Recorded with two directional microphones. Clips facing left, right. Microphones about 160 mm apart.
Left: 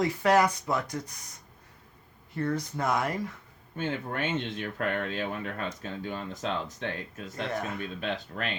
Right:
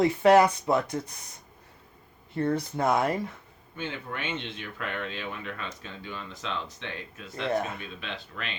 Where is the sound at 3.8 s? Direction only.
45° left (ahead or behind).